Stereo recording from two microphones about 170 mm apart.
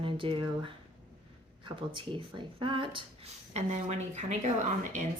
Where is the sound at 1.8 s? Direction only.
30° right (ahead or behind).